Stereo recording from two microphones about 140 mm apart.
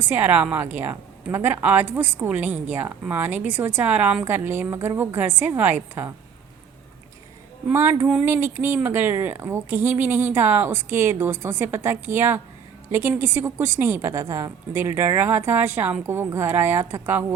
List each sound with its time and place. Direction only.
0.0 s a woman's voice: 15° right (ahead or behind)
7.7 s a woman's voice: 20° right (ahead or behind)